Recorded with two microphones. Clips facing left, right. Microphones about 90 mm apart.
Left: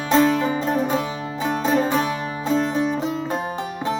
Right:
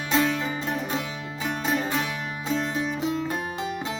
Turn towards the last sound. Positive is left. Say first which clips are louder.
# left 3 dB
turn(degrees=35)  # may be behind; listen again after turning